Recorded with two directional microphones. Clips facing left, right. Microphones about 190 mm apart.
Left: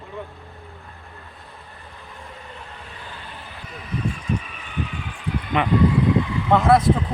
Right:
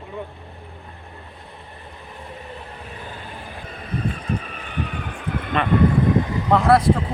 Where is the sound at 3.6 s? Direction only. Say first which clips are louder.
Even; 55° right (ahead or behind).